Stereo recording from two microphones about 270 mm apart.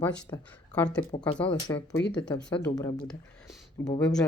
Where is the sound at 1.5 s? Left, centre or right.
Centre.